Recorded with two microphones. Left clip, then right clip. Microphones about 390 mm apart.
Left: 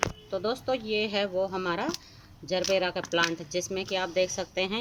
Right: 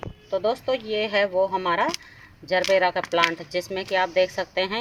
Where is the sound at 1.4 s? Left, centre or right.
Centre.